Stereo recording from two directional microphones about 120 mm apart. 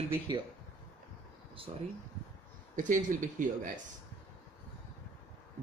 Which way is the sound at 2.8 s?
90° right.